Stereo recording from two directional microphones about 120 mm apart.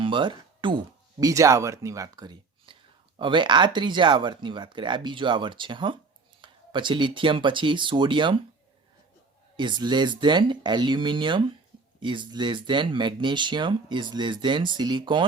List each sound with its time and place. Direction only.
0.0 s music: 45° right (ahead or behind)
1.2 s speech: 25° right (ahead or behind); by 8.4 s 40° right (ahead or behind)
9.6 s speech: 40° right (ahead or behind)